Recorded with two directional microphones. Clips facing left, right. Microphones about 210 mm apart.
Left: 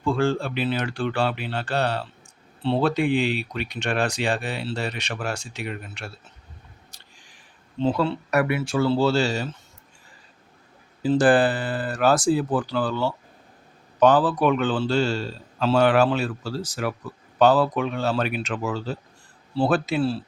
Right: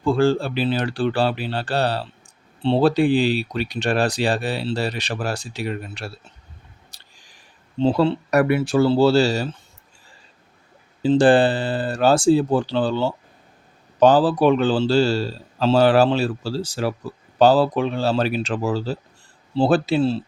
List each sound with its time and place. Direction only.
0.0 s speech: 35° right (ahead or behind)
6.9 s a sound: 35° right (ahead or behind)
7.8 s speech: 30° right (ahead or behind)
11.0 s speech: 25° right (ahead or behind)